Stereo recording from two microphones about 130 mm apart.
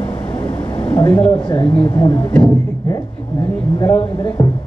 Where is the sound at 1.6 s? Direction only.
45° left (ahead or behind).